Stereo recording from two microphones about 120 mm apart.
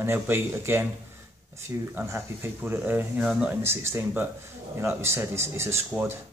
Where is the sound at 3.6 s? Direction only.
15° right (ahead or behind).